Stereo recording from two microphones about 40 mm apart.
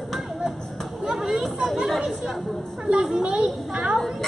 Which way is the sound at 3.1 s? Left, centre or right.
Centre.